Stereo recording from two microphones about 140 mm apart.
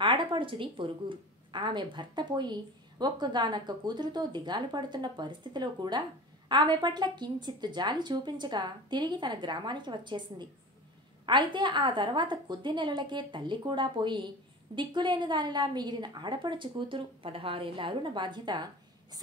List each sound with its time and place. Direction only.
0.0 s a woman's voice: 35° right (ahead or behind)